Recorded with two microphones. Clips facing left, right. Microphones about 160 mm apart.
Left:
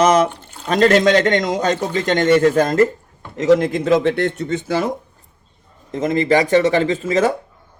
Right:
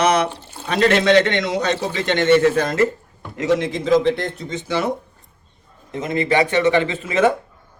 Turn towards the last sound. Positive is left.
turn(degrees=40)  # may be behind; listen again after turning